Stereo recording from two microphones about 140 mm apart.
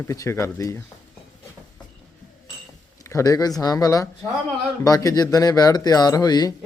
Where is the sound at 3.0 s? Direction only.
25° left (ahead or behind).